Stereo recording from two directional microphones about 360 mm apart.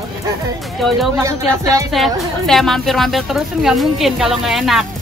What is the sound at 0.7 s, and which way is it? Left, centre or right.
A woman's voice, centre.